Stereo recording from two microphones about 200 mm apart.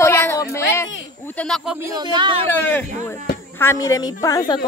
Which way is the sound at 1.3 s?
Centre (ahead or behind).